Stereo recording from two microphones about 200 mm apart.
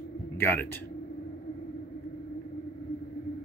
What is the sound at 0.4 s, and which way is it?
Speech, 10° left (ahead or behind).